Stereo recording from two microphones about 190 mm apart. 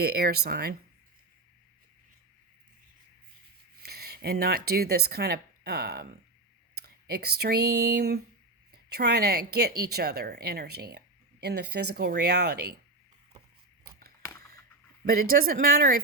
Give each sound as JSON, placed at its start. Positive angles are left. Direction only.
{"t": 0.0, "sound": "speech", "side_deg": -55}
{"t": 3.8, "sound": "speech", "side_deg": -55}
{"t": 15.0, "sound": "speech", "side_deg": -50}